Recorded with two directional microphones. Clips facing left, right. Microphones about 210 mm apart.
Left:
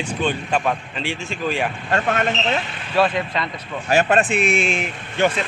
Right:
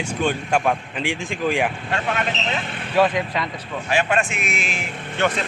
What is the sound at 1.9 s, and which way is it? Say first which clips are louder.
Speech: left 3 dB; 45° left (ahead or behind).